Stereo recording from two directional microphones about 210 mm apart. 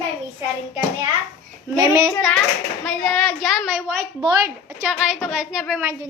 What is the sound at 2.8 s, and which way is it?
A child's voice, centre (ahead or behind).